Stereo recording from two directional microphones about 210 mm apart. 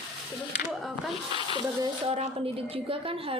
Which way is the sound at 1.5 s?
25° right (ahead or behind).